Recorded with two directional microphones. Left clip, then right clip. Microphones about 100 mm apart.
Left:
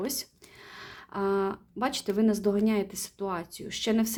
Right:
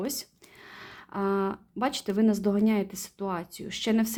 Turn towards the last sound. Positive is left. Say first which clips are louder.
# even
turn(degrees=-30)  # may be behind; listen again after turning